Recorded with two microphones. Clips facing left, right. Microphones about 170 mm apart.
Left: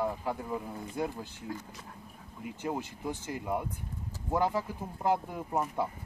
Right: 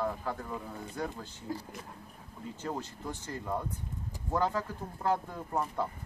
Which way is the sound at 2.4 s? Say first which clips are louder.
Left 2 dB; 15° left (ahead or behind).